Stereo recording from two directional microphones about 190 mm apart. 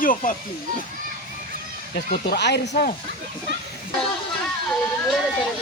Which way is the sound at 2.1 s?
50° left (ahead or behind).